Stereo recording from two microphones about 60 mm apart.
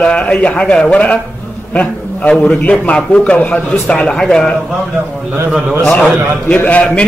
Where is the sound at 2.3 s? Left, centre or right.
Centre.